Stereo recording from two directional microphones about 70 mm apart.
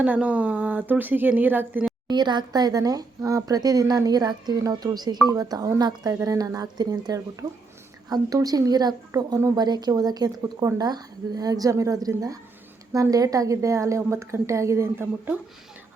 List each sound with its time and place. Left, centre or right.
0.0 s speech: right
2.0 s speech: right
6.2 s a woman's voice: right